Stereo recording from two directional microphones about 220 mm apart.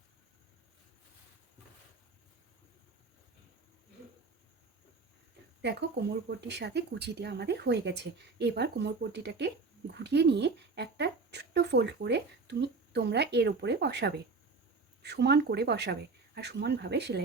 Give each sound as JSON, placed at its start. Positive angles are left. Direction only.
{"t": 5.6, "sound": "speech", "side_deg": -50}